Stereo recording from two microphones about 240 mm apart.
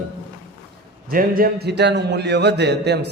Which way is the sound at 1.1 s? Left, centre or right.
Right.